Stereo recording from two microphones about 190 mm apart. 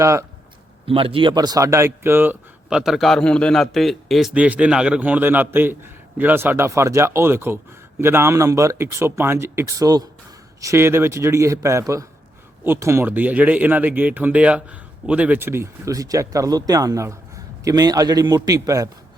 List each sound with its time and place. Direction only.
0.0 s speech: 15° right (ahead or behind)
0.9 s a man's voice: 30° right (ahead or behind)